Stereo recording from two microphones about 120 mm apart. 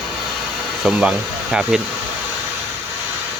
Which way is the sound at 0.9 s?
10° right (ahead or behind).